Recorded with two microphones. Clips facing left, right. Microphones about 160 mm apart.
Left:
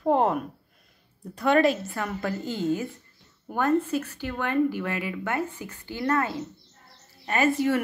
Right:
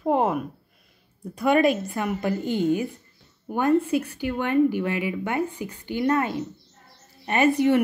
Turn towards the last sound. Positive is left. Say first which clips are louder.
# right 4 dB
turn(degrees=-20)  # may be behind; listen again after turning